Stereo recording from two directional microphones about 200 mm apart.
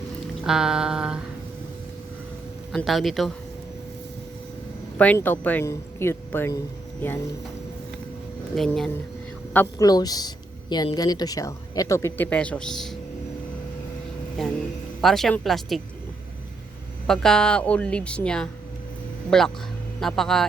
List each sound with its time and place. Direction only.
0.4 s a woman's voice: 5° right (ahead or behind)
2.7 s a woman's voice: centre (ahead or behind)
4.9 s a woman's voice: 10° left (ahead or behind)
8.5 s a woman's voice: centre (ahead or behind)
9.5 s a woman's voice: 15° left (ahead or behind)
14.4 s a woman's voice: centre (ahead or behind)
17.1 s a woman's voice: 5° left (ahead or behind)